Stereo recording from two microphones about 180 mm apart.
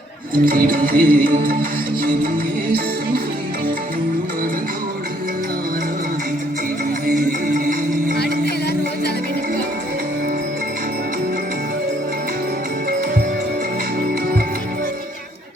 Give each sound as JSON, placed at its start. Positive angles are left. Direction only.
{"t": 0.3, "sound": "music", "side_deg": -50}
{"t": 7.6, "sound": "music", "side_deg": -50}